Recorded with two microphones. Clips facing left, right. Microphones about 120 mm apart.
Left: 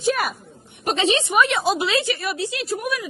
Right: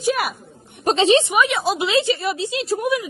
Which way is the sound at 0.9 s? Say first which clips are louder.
Right 5 dB; 30° right (ahead or behind).